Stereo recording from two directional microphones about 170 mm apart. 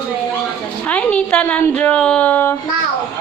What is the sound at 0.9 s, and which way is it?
A woman's voice, 5° left (ahead or behind).